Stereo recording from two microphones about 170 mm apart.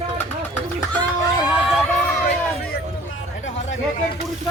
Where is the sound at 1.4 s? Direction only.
5° right (ahead or behind).